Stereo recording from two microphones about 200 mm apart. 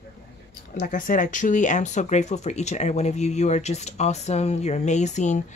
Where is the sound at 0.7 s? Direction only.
40° left (ahead or behind).